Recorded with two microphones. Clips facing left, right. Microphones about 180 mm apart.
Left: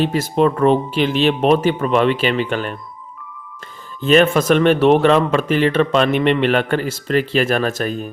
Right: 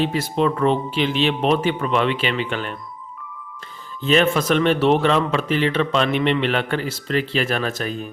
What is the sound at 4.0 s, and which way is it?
Speech, 50° left (ahead or behind).